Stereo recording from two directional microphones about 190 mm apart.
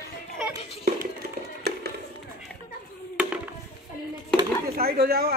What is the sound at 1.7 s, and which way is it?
Music, 60° right (ahead or behind).